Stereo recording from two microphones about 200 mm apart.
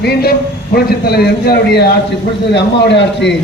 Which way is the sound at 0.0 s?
55° left (ahead or behind).